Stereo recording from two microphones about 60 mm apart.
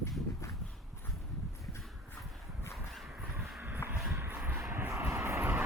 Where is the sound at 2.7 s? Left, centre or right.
Centre.